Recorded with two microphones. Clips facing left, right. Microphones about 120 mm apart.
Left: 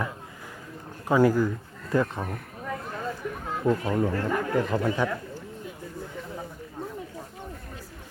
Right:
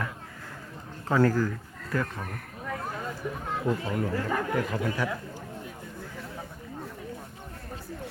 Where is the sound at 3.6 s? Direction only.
25° left (ahead or behind).